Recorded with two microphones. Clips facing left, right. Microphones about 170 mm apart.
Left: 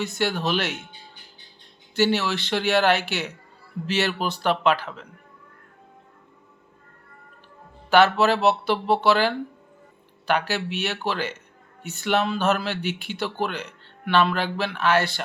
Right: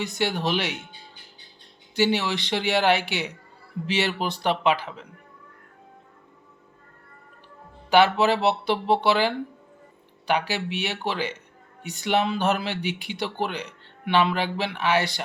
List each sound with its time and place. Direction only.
0.0 s speech: 15° right (ahead or behind)
2.0 s speech: 15° right (ahead or behind)
7.9 s speech: 15° right (ahead or behind)